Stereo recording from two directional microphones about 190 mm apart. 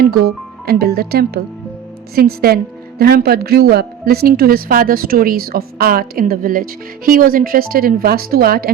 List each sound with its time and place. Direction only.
0.0 s a woman's voice: 55° right (ahead or behind)